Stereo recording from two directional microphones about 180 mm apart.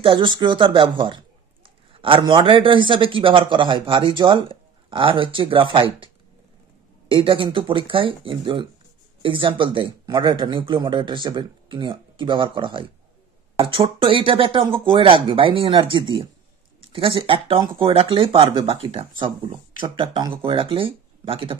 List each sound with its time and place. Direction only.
0.0 s a man's voice: 25° right (ahead or behind)
7.1 s a man's voice: 30° right (ahead or behind)